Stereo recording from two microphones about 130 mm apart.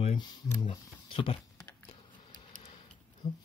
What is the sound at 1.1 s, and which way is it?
Typing, 40° left (ahead or behind).